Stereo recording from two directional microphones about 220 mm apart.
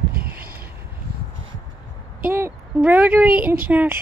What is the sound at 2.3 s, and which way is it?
Speech, 10° right (ahead or behind).